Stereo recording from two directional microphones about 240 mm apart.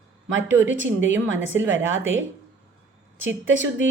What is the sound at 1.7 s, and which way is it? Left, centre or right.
Speech, right.